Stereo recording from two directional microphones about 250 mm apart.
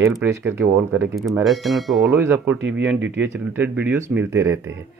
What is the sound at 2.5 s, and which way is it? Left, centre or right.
Speech, right.